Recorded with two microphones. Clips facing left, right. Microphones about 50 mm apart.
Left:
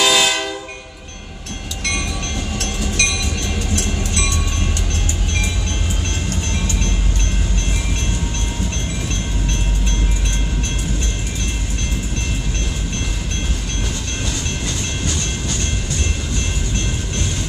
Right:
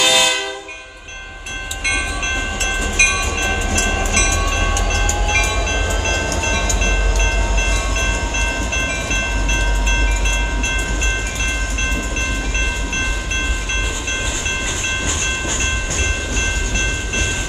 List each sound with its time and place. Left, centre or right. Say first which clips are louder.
0.0 s train: even; centre
2.6 s train: right 4 dB; right